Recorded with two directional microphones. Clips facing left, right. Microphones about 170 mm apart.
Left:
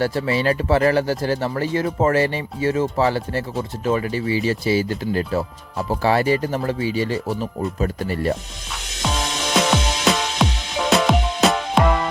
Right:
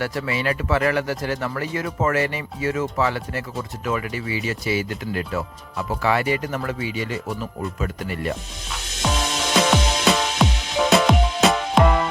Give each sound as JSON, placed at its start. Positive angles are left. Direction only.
{"t": 0.0, "sound": "speech", "side_deg": 30}
{"t": 9.6, "sound": "music", "side_deg": 0}